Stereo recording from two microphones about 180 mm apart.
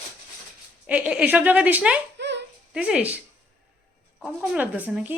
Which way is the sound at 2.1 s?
70° right (ahead or behind).